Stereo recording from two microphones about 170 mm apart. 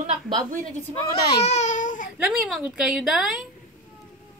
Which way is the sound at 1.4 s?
40° left (ahead or behind).